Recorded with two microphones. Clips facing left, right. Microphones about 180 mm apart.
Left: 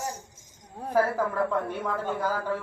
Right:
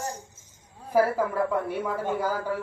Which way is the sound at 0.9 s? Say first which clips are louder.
Right 2 dB; 10° right (ahead or behind).